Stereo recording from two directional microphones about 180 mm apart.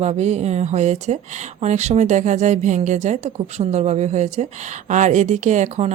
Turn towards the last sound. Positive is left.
turn(degrees=-40)  # may be behind; listen again after turning